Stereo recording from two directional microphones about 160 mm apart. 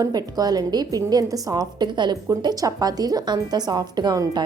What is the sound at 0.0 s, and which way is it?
A woman's voice, 25° right (ahead or behind).